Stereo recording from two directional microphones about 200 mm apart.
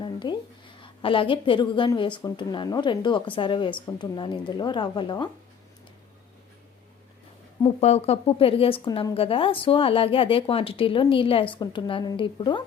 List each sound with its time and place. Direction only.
0.0 s a sound: 25° left (ahead or behind)
0.8 s a woman's voice: 25° left (ahead or behind)
7.6 s a woman's voice: 30° left (ahead or behind)